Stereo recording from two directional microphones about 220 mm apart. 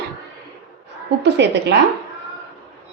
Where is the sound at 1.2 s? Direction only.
50° right (ahead or behind).